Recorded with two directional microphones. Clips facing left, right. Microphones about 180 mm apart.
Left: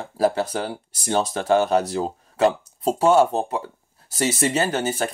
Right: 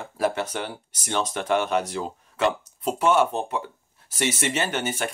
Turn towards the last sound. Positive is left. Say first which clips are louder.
# left 4 dB
turn(degrees=35)  # may be behind; listen again after turning